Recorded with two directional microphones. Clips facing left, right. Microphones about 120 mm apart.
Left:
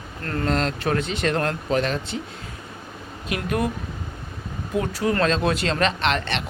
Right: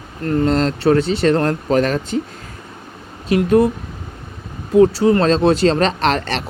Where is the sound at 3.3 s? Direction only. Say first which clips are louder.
Right 11 dB; 30° right (ahead or behind).